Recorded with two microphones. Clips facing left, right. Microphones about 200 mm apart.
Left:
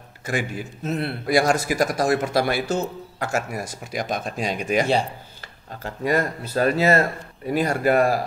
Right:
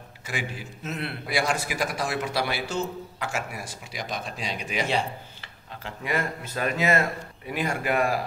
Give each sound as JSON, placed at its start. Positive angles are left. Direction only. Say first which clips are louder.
{"t": 0.3, "sound": "a man's voice", "louder": "left 7 dB", "side_deg": 50}
{"t": 0.8, "sound": "a man's voice", "louder": "left 7 dB", "side_deg": 35}